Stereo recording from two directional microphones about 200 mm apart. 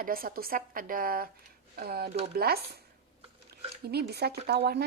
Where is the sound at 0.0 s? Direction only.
45° right (ahead or behind).